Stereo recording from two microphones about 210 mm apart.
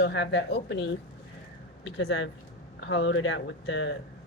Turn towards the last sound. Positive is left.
turn(degrees=60)  # may be behind; listen again after turning